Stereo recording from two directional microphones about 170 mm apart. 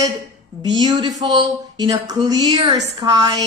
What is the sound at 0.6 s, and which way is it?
Speech, 25° right (ahead or behind).